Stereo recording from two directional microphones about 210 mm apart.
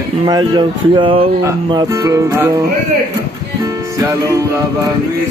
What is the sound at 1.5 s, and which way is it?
Music, 20° right (ahead or behind).